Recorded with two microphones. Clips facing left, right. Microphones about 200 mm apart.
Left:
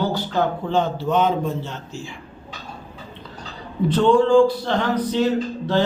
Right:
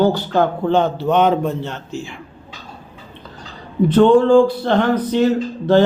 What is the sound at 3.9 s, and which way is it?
A man's voice, 55° right (ahead or behind).